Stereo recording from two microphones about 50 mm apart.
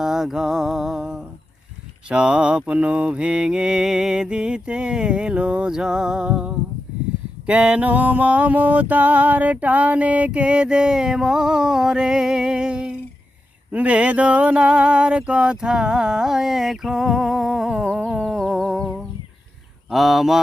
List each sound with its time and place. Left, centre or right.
0.0 s mantra: centre
2.0 s mantra: centre
7.4 s music: right
13.7 s mantra: right; by 17.8 s centre
17.8 s music: centre
19.9 s speech: centre